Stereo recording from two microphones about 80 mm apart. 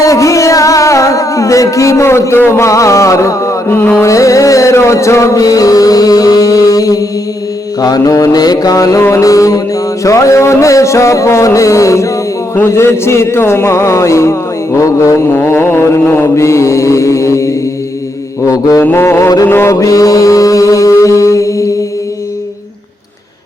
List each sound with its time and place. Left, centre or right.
0.1 s music: left
3.7 s mantra: left
4.0 s music: left
15.3 s music: left
18.8 s music: left
19.5 s mantra: left
19.7 s music: left